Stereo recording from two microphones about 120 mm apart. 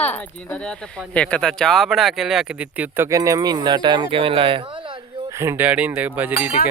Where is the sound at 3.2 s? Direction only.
35° right (ahead or behind).